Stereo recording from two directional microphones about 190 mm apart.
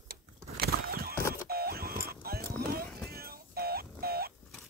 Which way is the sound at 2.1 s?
55° right (ahead or behind).